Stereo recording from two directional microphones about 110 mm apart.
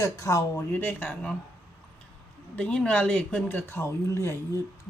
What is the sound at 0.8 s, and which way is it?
Speech, 15° left (ahead or behind).